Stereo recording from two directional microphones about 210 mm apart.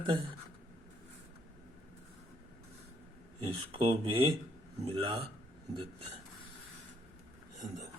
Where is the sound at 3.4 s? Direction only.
25° right (ahead or behind).